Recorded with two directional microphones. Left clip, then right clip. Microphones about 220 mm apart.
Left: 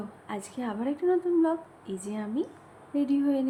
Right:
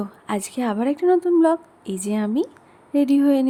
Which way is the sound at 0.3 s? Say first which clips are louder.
Right 10 dB; 50° right (ahead or behind).